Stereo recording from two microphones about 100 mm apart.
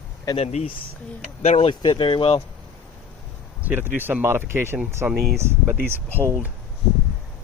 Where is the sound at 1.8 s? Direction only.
50° left (ahead or behind).